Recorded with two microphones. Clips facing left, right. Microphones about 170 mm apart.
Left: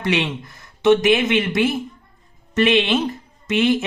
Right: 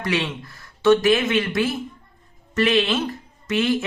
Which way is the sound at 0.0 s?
20° left (ahead or behind).